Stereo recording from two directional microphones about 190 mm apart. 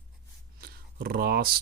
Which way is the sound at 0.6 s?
50° right (ahead or behind).